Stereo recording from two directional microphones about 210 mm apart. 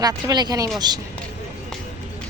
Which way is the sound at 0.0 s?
20° right (ahead or behind).